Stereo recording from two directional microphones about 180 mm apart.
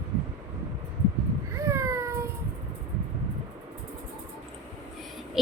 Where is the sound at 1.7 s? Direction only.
15° right (ahead or behind).